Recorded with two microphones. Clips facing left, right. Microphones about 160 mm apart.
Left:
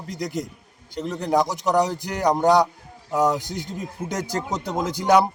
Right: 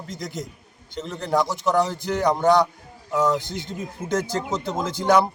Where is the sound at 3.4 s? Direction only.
40° left (ahead or behind).